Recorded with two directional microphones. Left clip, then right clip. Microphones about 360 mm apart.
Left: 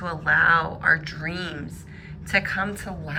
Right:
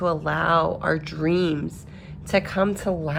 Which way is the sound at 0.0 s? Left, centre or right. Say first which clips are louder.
Left 3 dB; centre.